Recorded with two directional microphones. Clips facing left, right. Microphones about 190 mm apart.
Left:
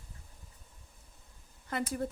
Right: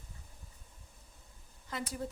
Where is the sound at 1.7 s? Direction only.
55° left (ahead or behind).